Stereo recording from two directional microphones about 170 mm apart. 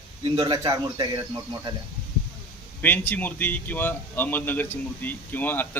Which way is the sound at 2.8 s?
10° left (ahead or behind).